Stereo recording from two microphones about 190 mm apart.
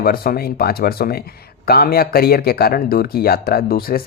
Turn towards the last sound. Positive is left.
turn(degrees=50)  # may be behind; listen again after turning